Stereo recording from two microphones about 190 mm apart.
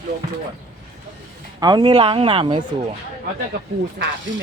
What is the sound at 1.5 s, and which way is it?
Speech, 20° right (ahead or behind).